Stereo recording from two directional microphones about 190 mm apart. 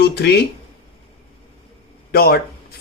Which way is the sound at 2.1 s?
55° left (ahead or behind).